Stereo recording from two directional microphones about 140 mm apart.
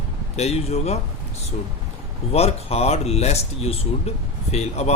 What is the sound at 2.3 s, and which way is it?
Speech, 45° left (ahead or behind).